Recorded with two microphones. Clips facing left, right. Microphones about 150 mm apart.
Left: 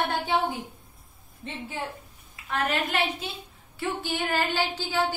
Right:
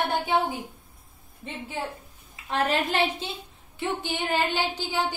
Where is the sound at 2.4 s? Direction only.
30° right (ahead or behind).